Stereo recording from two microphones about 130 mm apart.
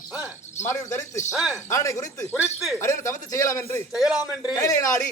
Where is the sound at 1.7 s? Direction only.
25° left (ahead or behind).